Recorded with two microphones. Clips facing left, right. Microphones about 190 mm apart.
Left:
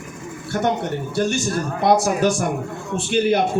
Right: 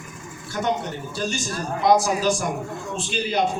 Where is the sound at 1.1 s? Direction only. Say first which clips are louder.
Left 7 dB; 60° left (ahead or behind).